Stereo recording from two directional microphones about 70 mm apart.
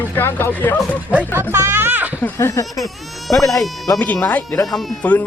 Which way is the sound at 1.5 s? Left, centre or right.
Right.